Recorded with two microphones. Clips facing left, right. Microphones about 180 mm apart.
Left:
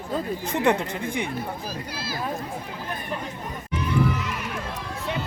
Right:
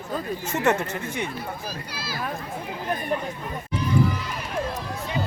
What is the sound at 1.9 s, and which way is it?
Speech, 50° left (ahead or behind).